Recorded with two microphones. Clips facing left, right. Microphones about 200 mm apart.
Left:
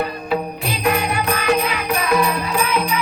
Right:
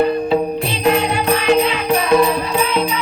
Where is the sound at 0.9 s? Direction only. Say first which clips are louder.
Right 4 dB; 25° right (ahead or behind).